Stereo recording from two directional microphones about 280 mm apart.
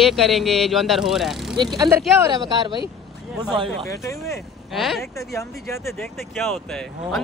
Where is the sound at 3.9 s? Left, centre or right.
Centre.